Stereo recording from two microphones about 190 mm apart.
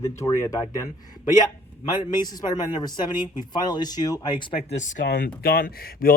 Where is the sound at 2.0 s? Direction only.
20° left (ahead or behind); by 5.0 s 40° left (ahead or behind).